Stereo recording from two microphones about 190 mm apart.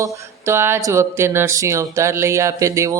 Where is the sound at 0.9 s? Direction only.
15° right (ahead or behind).